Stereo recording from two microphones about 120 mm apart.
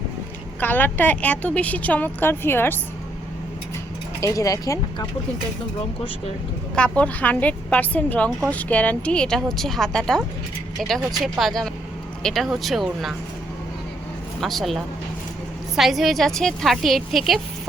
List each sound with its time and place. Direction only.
0.6 s a woman's voice: 15° left (ahead or behind)
4.2 s speech: 30° left (ahead or behind)
6.7 s a woman's voice: 10° left (ahead or behind)
14.4 s a woman's voice: centre (ahead or behind)